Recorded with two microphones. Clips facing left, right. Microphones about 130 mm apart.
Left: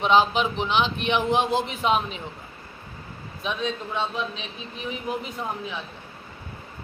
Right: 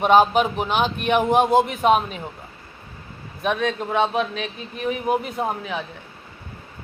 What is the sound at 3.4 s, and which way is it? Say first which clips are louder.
Speech: right 6 dB; 60° right (ahead or behind).